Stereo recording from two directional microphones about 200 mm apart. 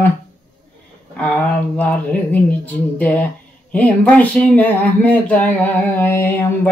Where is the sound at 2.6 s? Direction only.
5° left (ahead or behind).